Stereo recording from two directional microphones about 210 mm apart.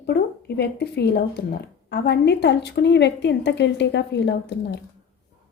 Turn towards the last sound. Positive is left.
turn(degrees=55)  # may be behind; listen again after turning